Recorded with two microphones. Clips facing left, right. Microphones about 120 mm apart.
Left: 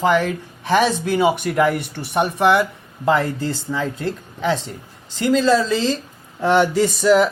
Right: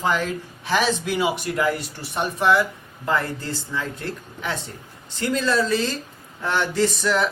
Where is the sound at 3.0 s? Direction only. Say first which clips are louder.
Left 6 dB; 90° left.